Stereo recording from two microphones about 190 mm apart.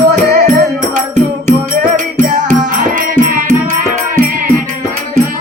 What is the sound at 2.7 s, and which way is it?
Music, 45° right (ahead or behind).